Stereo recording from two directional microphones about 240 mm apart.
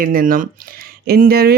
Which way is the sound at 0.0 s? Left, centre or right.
Right.